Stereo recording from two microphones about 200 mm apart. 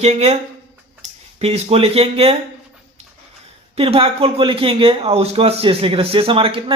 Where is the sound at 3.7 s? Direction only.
30° right (ahead or behind).